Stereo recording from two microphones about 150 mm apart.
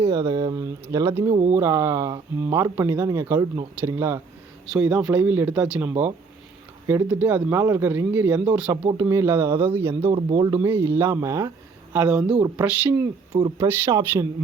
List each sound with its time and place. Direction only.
0.1 s speech: 20° right (ahead or behind)
4.7 s speech: 5° right (ahead or behind)
11.9 s speech: 5° right (ahead or behind)